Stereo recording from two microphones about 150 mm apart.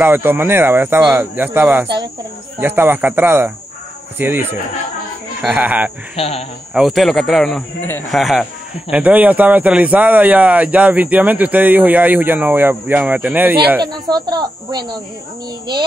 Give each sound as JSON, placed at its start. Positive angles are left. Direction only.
{"t": 0.0, "sound": "speech", "side_deg": -15}
{"t": 6.1, "sound": "speech", "side_deg": 40}
{"t": 6.7, "sound": "a man's voice", "side_deg": 0}
{"t": 14.0, "sound": "speech", "side_deg": -25}